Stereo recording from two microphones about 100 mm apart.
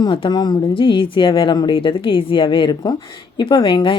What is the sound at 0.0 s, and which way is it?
Speech, 50° left (ahead or behind).